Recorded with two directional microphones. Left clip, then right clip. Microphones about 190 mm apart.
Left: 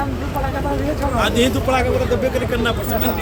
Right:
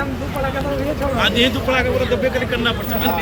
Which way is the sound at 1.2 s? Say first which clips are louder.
Right 1 dB; 50° left (ahead or behind).